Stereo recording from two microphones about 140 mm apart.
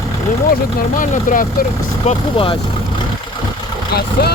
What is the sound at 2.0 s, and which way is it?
Speech, 40° left (ahead or behind).